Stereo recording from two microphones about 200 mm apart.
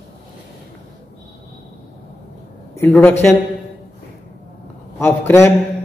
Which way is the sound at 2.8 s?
10° left (ahead or behind).